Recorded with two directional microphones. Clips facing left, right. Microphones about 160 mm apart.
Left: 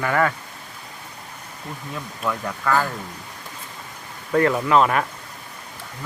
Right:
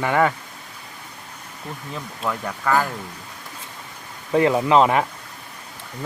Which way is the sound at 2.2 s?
20° right (ahead or behind).